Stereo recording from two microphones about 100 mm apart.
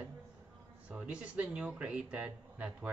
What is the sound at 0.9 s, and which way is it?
Speech, 10° right (ahead or behind).